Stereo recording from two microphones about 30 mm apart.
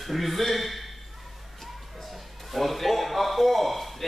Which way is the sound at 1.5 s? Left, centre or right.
Centre.